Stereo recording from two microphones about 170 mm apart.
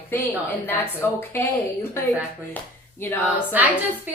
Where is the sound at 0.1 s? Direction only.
15° left (ahead or behind).